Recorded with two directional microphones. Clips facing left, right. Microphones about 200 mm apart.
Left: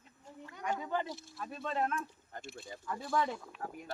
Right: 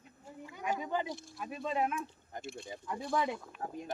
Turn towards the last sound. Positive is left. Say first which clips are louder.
# right 2 dB
turn(degrees=0)  # may be behind; listen again after turning